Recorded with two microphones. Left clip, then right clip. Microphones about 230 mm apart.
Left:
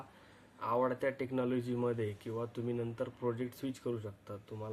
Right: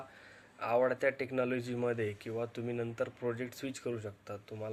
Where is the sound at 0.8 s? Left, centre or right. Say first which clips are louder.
Right 4 dB; centre.